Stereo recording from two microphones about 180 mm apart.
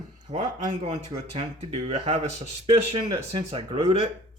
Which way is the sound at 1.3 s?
35° right (ahead or behind).